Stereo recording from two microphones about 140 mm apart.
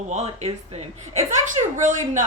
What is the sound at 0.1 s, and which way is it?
Speech, 50° right (ahead or behind).